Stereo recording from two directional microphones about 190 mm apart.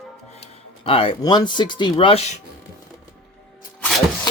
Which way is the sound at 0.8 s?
30° left (ahead or behind).